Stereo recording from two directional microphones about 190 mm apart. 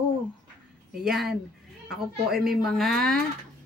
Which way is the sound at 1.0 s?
Centre (ahead or behind).